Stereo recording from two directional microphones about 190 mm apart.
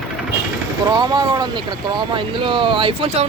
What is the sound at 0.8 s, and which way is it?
Speech, 20° right (ahead or behind).